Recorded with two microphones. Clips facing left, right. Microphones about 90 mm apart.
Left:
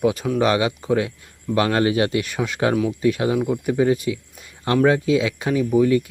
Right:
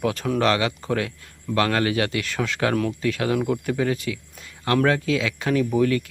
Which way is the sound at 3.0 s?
20° left (ahead or behind).